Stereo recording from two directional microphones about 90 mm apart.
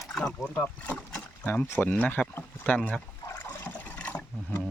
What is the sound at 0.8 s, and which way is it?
Speech, 15° left (ahead or behind).